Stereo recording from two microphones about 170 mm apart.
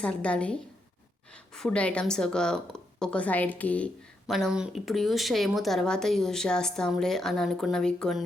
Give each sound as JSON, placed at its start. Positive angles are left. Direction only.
{"t": 0.0, "sound": "speech", "side_deg": 5}